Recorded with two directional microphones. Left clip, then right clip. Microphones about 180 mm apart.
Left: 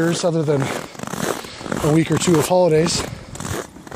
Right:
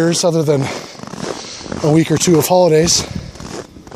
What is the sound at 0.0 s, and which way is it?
Speech, 50° right (ahead or behind).